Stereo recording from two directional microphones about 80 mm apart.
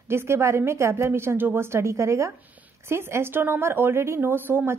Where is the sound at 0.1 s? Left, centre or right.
Right.